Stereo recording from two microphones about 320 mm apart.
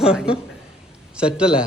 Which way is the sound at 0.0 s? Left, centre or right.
Centre.